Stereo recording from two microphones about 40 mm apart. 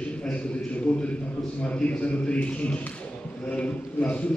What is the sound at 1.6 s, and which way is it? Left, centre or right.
A man's voice, left.